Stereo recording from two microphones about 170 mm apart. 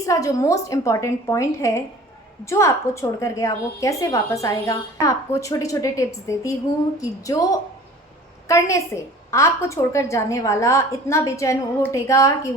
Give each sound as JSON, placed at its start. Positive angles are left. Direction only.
{"t": 0.0, "sound": "a woman's voice", "side_deg": 20}